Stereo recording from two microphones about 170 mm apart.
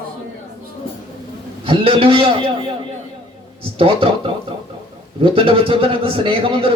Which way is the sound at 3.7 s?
30° right (ahead or behind).